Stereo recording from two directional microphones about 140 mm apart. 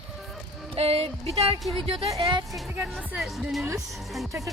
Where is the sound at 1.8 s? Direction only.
35° right (ahead or behind).